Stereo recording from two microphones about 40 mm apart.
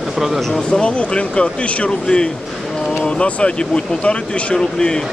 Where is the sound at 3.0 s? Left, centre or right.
Left.